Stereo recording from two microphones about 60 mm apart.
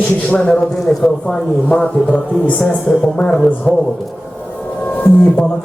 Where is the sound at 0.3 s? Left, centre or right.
Centre.